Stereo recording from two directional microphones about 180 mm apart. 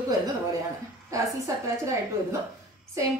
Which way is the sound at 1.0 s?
15° right (ahead or behind).